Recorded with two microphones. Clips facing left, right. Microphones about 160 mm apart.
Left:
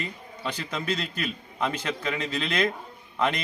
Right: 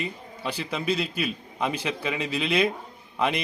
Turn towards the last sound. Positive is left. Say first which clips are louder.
# right 1 dB
turn(degrees=-10)  # may be behind; listen again after turning